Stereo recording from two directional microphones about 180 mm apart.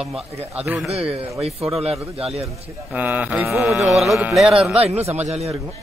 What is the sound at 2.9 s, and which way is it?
Music, 10° right (ahead or behind).